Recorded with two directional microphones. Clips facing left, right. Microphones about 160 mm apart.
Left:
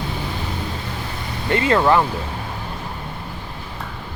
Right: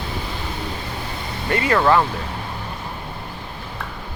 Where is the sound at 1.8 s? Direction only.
10° left (ahead or behind).